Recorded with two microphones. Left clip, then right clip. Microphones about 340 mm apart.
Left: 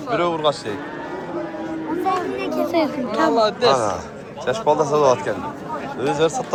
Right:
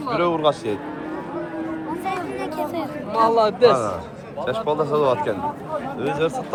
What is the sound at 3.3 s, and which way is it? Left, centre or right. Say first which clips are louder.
Speech: right 3 dB; right.